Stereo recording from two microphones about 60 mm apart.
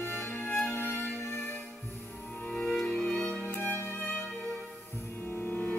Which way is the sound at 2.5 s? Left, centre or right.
Centre.